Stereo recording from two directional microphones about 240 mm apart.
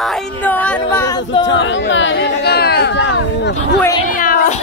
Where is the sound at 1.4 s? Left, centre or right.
Left.